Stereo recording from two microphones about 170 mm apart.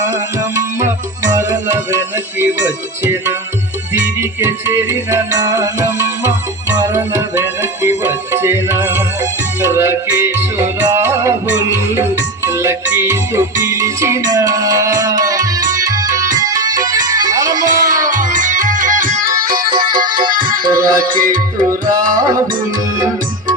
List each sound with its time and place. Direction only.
0.1 s music: 20° right (ahead or behind)
17.9 s music: 50° right (ahead or behind)
20.1 s music: 25° right (ahead or behind)
20.9 s music: 55° right (ahead or behind)
22.2 s music: 20° right (ahead or behind)